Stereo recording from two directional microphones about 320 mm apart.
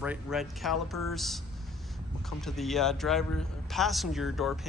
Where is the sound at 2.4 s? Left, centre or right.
Centre.